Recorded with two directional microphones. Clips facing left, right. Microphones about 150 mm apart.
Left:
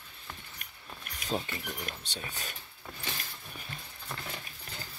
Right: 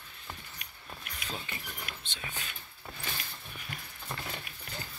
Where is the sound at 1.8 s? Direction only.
40° left (ahead or behind).